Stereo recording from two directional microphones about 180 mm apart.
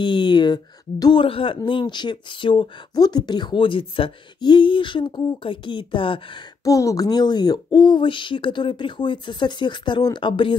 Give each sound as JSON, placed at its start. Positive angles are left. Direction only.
{"t": 0.0, "sound": "speech", "side_deg": 25}
{"t": 6.7, "sound": "speech", "side_deg": 20}